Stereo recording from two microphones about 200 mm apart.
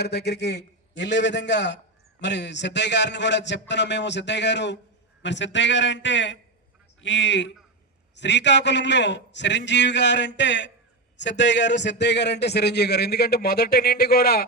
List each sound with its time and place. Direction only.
0.0 s speech: 55° left (ahead or behind)